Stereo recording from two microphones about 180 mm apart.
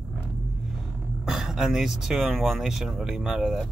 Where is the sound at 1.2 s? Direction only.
Centre (ahead or behind).